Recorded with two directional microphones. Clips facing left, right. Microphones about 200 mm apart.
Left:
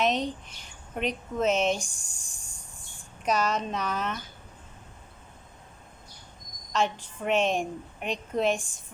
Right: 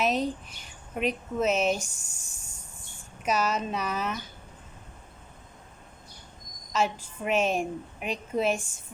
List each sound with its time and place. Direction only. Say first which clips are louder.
0.0 s a woman's voice: even; 5° right (ahead or behind)
6.7 s a woman's voice: even; 5° right (ahead or behind)